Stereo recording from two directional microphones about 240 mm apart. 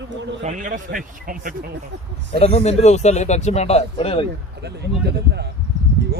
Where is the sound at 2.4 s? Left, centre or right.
Left.